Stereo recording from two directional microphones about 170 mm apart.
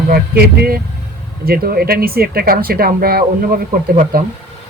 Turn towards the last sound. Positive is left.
turn(degrees=-55)  # may be behind; listen again after turning